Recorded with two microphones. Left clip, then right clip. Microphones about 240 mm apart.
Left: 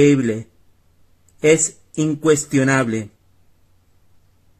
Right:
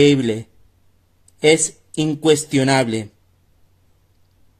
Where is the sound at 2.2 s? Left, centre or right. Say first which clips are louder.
Right 1 dB; centre.